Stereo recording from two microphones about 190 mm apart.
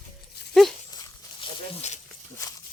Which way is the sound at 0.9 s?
20° left (ahead or behind).